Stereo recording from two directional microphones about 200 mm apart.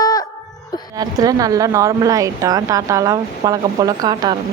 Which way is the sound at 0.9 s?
20° right (ahead or behind).